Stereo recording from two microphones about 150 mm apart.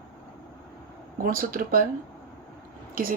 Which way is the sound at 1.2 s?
70° right (ahead or behind).